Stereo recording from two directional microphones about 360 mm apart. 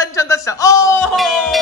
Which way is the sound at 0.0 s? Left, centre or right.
Centre.